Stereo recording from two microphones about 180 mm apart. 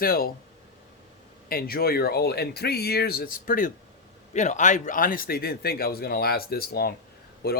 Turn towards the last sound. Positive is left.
turn(degrees=60)  # may be behind; listen again after turning